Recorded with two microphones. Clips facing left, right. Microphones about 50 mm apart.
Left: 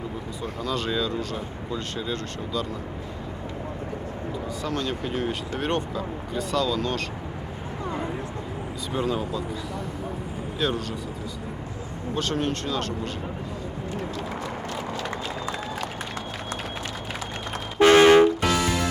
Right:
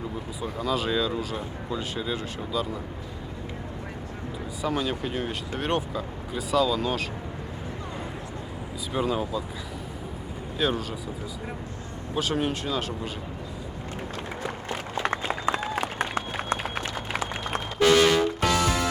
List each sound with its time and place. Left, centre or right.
0.6 s speech: centre
4.6 s speech: centre
8.9 s speech: centre
10.6 s speech: centre
12.1 s speech: centre
15.0 s run: right
17.7 s toot: left